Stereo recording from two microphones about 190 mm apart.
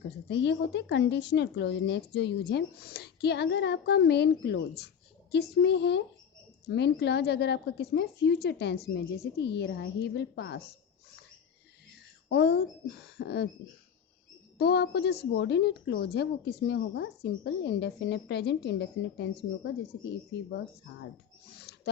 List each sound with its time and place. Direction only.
0.3 s speech: 65° left (ahead or behind)
11.9 s a sound: 60° left (ahead or behind)
14.6 s speech: 60° left (ahead or behind)